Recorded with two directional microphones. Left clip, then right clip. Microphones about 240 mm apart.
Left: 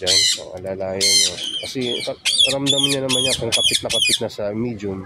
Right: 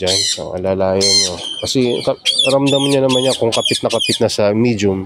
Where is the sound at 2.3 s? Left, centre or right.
Centre.